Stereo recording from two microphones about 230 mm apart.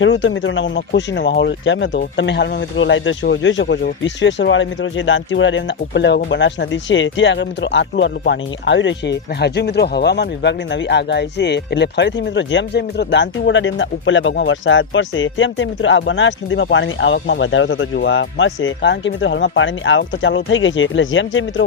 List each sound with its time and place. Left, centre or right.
0.0 s speech: left